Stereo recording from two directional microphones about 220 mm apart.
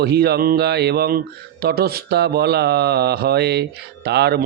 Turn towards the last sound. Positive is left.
turn(degrees=-45)  # may be behind; listen again after turning